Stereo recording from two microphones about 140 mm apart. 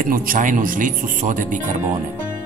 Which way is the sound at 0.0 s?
85° right.